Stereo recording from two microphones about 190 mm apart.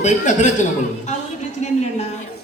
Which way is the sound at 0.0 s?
40° left (ahead or behind).